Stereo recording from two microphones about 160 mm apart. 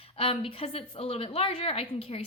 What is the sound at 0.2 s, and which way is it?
A woman's voice, 35° left (ahead or behind).